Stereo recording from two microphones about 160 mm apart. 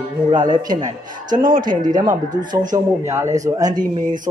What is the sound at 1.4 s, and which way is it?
Speech, 55° right (ahead or behind).